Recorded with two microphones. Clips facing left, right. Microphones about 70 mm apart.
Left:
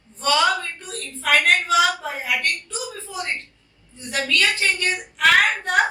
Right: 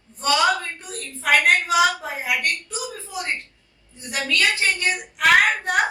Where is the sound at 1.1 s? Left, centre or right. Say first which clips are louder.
Even; right.